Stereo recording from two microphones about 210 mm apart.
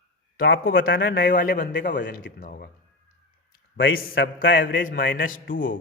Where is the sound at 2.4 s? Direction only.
45° left (ahead or behind).